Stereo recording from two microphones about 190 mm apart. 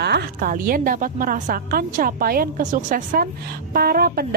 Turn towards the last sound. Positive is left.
turn(degrees=-55)  # may be behind; listen again after turning